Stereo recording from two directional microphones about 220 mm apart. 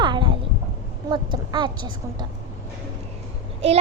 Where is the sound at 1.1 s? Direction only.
20° right (ahead or behind).